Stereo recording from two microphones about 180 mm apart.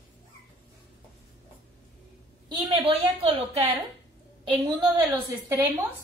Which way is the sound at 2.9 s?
35° right (ahead or behind).